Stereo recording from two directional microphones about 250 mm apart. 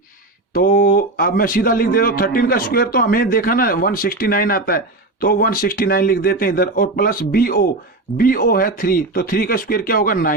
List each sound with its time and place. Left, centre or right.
0.5 s speech: left